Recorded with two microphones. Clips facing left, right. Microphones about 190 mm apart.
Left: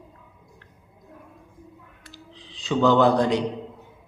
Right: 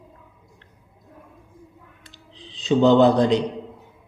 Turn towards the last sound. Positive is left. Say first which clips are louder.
# right 3 dB
turn(degrees=-20)  # may be behind; listen again after turning